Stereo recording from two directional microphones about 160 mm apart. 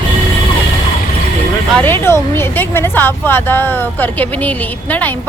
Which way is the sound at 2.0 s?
15° left (ahead or behind).